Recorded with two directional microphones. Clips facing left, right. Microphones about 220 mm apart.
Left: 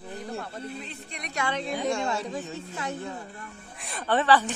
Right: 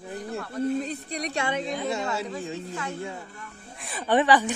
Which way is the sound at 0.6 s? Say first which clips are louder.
Right 11 dB; 45° right (ahead or behind).